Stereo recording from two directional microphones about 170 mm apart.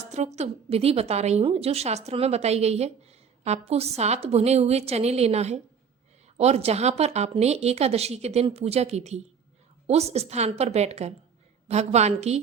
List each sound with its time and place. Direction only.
0.0 s a woman's voice: 40° right (ahead or behind)